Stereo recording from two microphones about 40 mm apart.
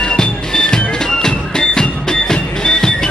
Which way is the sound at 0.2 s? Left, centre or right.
Centre.